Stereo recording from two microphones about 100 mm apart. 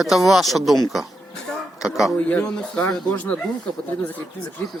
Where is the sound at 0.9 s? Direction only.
Centre (ahead or behind).